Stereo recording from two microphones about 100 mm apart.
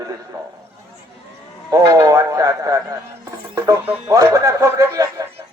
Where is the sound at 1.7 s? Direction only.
35° right (ahead or behind).